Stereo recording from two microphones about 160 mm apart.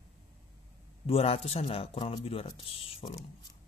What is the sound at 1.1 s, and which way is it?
A man's voice, 40° left (ahead or behind).